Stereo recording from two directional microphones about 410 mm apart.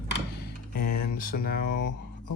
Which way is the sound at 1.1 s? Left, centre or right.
Left.